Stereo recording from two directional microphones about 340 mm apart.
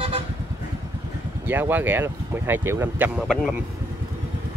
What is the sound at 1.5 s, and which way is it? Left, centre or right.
Speech, centre.